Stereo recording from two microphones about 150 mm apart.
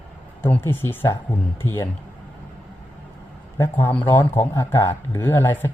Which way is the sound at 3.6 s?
15° left (ahead or behind).